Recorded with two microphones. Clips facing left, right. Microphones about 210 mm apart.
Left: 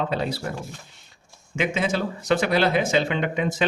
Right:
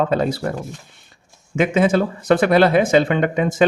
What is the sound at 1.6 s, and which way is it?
A man's voice, 50° right (ahead or behind).